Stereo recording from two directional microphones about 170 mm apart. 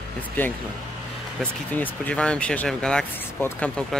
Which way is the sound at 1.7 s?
10° left (ahead or behind).